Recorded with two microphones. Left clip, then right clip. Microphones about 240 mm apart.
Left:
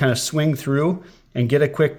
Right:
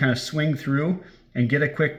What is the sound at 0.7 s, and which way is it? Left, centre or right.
Speech, left.